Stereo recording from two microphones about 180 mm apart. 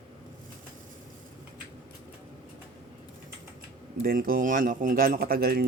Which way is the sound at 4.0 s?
55° right (ahead or behind).